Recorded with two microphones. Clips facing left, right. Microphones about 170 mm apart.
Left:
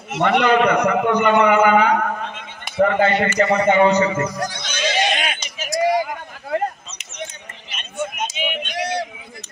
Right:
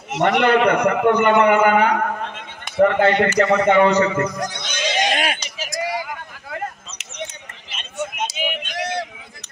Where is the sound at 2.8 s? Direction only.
65° right (ahead or behind).